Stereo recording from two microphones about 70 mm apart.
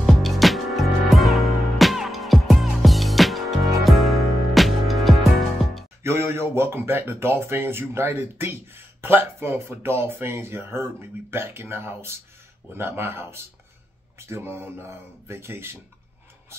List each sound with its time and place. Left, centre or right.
0.0 s music: centre
6.0 s speech: right